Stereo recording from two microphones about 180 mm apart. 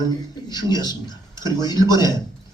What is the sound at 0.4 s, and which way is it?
A man's voice, 25° left (ahead or behind).